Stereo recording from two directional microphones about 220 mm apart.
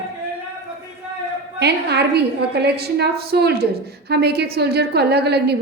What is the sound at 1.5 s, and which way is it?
A woman's voice, 50° right (ahead or behind).